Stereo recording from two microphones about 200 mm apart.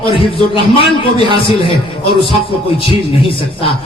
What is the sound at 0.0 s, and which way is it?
A man's voice, 25° left (ahead or behind).